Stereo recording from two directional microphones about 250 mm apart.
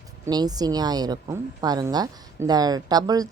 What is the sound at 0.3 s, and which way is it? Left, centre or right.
A woman's voice, centre.